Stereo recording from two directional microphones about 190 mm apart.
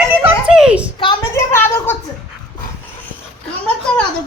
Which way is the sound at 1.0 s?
25° left (ahead or behind).